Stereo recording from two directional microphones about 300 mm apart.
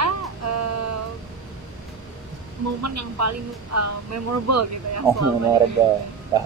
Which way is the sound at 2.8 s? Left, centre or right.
Right.